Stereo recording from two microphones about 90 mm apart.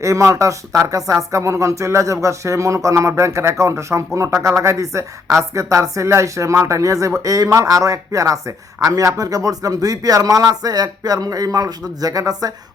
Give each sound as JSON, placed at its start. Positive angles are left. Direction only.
{"t": 0.0, "sound": "speech", "side_deg": -35}